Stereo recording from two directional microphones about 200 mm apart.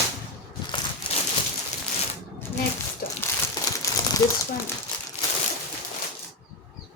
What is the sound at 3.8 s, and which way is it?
Crumpling, 15° left (ahead or behind).